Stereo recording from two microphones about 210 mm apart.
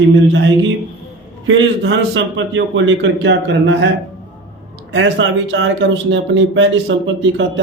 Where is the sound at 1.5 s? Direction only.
55° right (ahead or behind).